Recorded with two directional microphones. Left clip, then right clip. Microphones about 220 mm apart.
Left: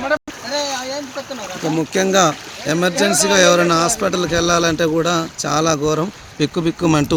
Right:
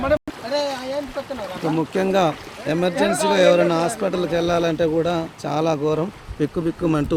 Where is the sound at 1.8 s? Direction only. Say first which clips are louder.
Left 5 dB; 25° left (ahead or behind); by 7.1 s 40° left (ahead or behind).